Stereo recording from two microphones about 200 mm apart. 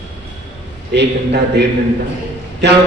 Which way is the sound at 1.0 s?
55° right (ahead or behind).